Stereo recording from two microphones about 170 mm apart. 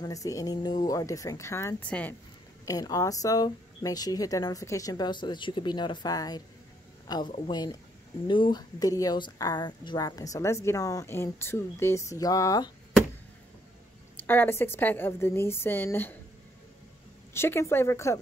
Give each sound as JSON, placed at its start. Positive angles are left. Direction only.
{"t": 0.0, "sound": "a woman's voice", "side_deg": 20}
{"t": 2.6, "sound": "a woman's voice", "side_deg": 20}
{"t": 14.2, "sound": "a woman's voice", "side_deg": 10}
{"t": 17.3, "sound": "a woman's voice", "side_deg": 15}